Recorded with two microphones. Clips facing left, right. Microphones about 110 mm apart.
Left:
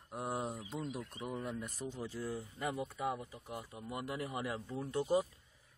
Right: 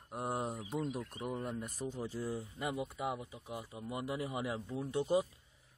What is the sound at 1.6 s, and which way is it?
Speech, 45° right (ahead or behind).